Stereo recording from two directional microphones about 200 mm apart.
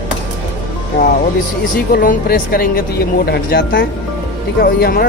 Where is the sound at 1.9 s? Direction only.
45° left (ahead or behind).